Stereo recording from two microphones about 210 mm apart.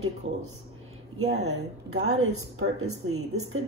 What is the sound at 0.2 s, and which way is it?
Speech, 70° right (ahead or behind).